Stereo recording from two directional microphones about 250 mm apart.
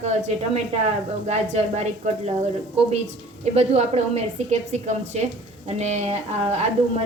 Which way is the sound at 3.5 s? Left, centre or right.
Right.